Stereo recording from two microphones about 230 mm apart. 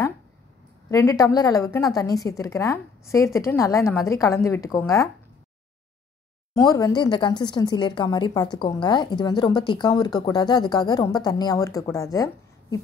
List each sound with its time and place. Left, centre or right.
0.8 s a woman's voice: centre
6.5 s a woman's voice: centre